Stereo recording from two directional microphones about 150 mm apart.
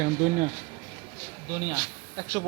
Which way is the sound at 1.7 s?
25° right (ahead or behind).